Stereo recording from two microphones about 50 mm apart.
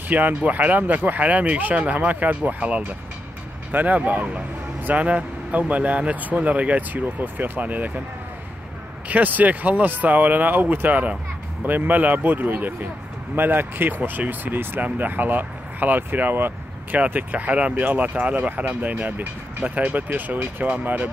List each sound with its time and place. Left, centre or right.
0.1 s speech: right
9.1 s speech: right
17.1 s speech: right